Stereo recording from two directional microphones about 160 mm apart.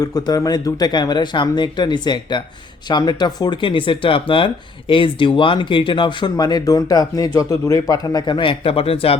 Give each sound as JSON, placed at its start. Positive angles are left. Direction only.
{"t": 0.0, "sound": "speech", "side_deg": 20}